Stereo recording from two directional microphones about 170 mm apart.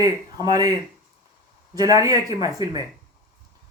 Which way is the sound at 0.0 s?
25° right (ahead or behind).